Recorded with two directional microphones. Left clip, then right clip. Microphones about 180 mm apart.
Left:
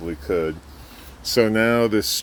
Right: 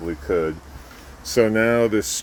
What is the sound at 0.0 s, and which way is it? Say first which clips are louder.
Speech: right 1 dB; 15° left (ahead or behind).